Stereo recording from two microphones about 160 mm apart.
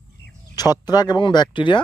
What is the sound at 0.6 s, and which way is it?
Speech, 25° left (ahead or behind).